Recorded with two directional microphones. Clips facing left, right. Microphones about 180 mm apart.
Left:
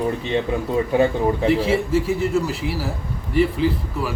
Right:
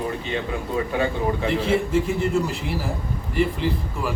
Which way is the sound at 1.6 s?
5° left (ahead or behind).